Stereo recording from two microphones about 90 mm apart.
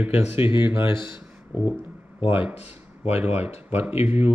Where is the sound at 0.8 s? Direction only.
60° left (ahead or behind).